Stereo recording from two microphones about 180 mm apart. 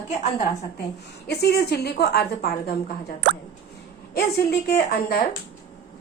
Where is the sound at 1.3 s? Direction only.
65° left (ahead or behind).